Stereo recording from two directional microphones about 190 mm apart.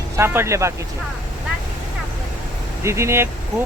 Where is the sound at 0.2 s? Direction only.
15° right (ahead or behind).